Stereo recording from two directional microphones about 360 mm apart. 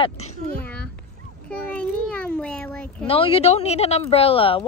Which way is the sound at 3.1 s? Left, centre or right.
Centre.